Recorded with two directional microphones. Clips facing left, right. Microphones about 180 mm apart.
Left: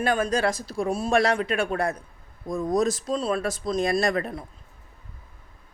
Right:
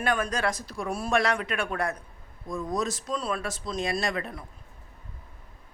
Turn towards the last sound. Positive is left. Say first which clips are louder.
# left 6 dB
turn(degrees=40)  # may be behind; listen again after turning